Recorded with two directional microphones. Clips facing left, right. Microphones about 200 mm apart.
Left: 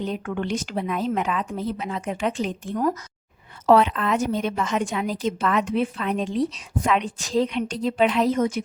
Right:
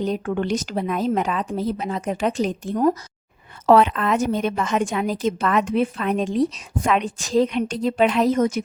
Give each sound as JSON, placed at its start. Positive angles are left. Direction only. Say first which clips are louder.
{"t": 0.0, "sound": "a woman's voice", "louder": "right 4 dB", "side_deg": -40}
{"t": 3.7, "sound": "a woman's voice", "louder": "right 2 dB", "side_deg": -50}